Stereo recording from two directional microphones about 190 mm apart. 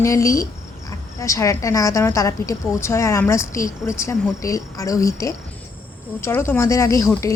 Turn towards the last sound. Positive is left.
turn(degrees=15)  # may be behind; listen again after turning